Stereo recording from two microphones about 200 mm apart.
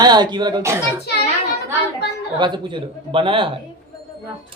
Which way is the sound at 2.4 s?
25° right (ahead or behind).